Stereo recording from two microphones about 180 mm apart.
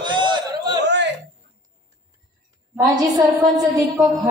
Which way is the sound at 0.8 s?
70° right (ahead or behind).